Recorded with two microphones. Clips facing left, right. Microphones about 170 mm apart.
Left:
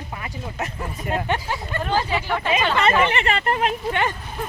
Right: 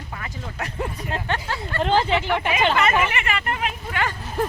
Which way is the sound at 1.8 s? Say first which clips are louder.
Right 4 dB; 25° right (ahead or behind).